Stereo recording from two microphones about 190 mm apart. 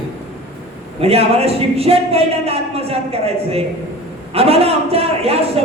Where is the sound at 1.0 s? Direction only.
30° right (ahead or behind).